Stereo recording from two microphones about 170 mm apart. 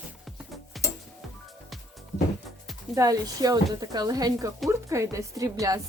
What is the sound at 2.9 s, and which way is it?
Speech, 20° right (ahead or behind).